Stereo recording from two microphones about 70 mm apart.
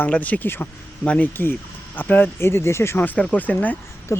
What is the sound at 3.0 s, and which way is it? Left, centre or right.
Speech, left.